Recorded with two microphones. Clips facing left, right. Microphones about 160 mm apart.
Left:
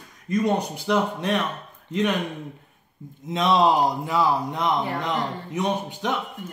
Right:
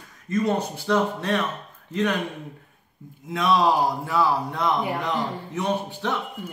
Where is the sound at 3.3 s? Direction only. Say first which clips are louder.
Left 1 dB; 25° left (ahead or behind).